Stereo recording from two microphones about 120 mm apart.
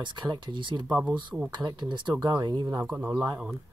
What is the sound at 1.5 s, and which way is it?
Speech, 40° right (ahead or behind).